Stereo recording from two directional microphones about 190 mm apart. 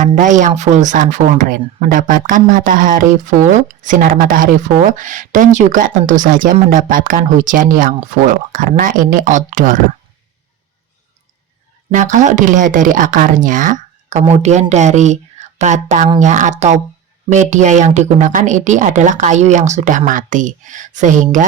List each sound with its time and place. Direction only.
0.0 s speech: 40° right (ahead or behind)
11.9 s a woman's voice: 40° right (ahead or behind)